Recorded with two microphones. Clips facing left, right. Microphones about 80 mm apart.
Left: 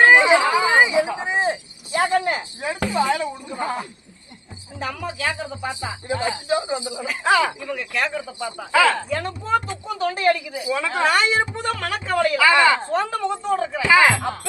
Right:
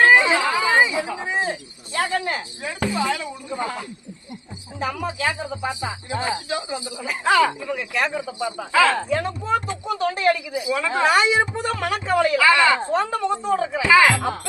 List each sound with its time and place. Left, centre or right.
0.0 s a sound: centre
2.2 s cricket: left
3.2 s a sound: left
4.8 s speech: centre
5.3 s speech: centre
6.5 s speech: left
7.6 s speech: centre
8.2 s speech: centre
8.7 s speech: centre